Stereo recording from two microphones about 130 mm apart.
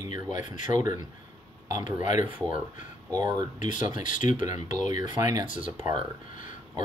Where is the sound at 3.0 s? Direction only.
30° right (ahead or behind).